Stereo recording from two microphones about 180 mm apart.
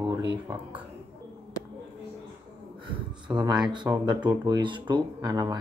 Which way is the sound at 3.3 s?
15° right (ahead or behind).